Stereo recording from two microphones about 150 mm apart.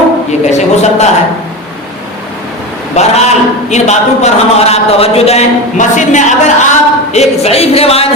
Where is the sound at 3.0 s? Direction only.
50° left (ahead or behind).